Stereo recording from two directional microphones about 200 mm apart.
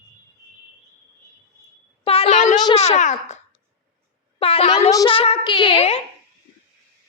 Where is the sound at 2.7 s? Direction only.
35° left (ahead or behind).